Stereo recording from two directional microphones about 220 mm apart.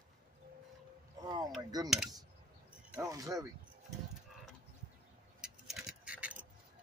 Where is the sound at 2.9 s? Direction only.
15° right (ahead or behind).